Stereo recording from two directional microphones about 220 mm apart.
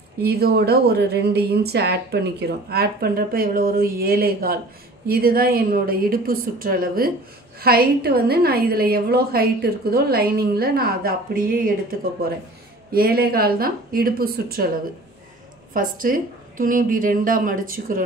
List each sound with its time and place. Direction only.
0.2 s a woman's voice: 45° right (ahead or behind)
15.7 s a woman's voice: 40° right (ahead or behind)